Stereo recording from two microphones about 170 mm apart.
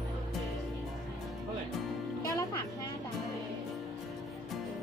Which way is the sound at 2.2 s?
20° left (ahead or behind).